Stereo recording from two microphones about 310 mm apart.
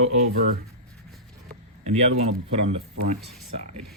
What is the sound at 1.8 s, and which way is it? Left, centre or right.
Speech, right.